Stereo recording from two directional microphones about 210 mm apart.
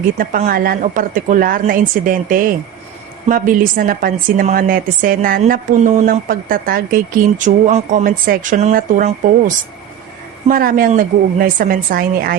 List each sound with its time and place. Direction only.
0.2 s a woman's voice: 45° right (ahead or behind)
10.5 s a woman's voice: 40° right (ahead or behind)